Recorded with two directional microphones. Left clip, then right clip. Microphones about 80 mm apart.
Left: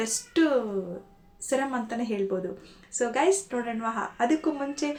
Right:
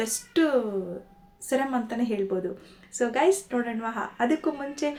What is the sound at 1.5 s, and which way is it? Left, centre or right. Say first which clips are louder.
A woman's voice: right 1 dB; right.